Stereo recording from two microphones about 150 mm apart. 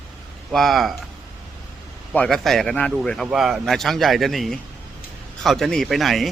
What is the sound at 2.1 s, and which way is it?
Speech, 5° left (ahead or behind).